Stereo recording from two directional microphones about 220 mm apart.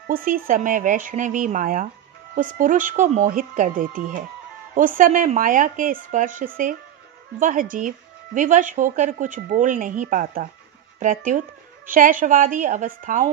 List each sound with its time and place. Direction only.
0.0 s speech: 40° right (ahead or behind)